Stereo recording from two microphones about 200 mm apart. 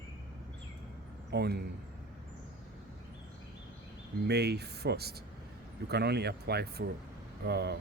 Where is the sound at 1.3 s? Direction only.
55° right (ahead or behind).